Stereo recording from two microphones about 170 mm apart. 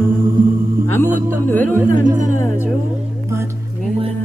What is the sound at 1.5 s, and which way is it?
Speech, 10° left (ahead or behind).